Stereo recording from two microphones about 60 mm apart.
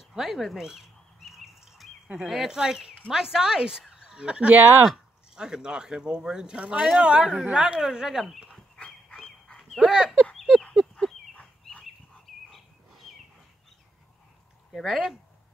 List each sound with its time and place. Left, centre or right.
0.0 s bird: centre
2.2 s speech: centre
9.2 s dog: centre
9.8 s speech: centre
10.3 s a sound: centre
14.7 s speech: centre